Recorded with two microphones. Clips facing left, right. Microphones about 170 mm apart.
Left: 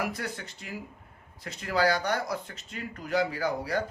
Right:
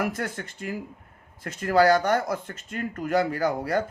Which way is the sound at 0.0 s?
50° right (ahead or behind).